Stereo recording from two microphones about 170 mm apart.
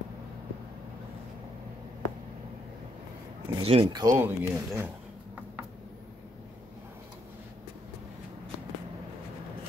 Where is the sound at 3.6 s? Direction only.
30° right (ahead or behind); by 4.9 s 10° right (ahead or behind).